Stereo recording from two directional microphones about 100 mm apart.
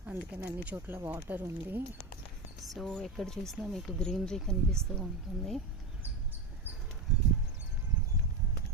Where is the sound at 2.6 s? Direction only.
Centre (ahead or behind).